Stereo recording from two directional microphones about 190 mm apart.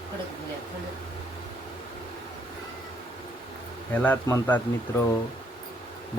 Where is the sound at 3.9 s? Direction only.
10° left (ahead or behind).